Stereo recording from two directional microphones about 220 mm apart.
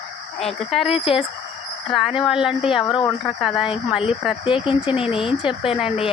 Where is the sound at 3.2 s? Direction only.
Centre (ahead or behind).